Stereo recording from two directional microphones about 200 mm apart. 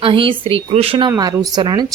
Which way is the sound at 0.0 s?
25° right (ahead or behind).